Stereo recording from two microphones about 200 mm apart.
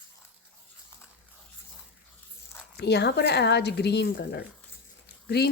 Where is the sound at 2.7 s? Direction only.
55° left (ahead or behind).